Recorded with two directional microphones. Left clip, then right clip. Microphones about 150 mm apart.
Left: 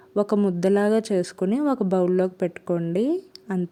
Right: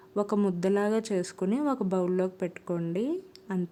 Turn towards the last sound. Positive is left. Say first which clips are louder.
# left 7 dB
turn(degrees=30)  # may be behind; listen again after turning